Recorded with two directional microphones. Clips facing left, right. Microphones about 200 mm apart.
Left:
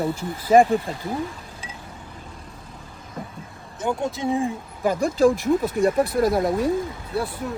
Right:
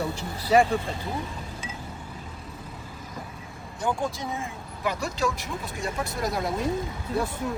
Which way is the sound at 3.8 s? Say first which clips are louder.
Left 4 dB; 20° left (ahead or behind).